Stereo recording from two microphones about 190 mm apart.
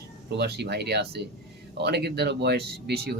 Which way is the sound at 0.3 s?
60° right (ahead or behind).